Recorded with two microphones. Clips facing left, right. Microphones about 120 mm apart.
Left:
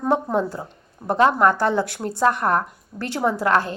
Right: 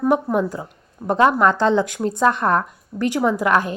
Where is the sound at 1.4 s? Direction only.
20° right (ahead or behind).